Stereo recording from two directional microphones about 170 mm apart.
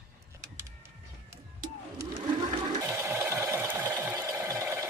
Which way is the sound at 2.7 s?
15° right (ahead or behind).